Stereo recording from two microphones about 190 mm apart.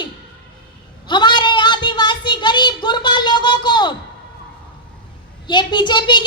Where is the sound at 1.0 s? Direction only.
25° left (ahead or behind).